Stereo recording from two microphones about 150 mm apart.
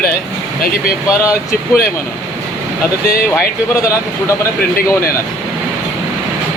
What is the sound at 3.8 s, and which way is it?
Speech, 20° left (ahead or behind).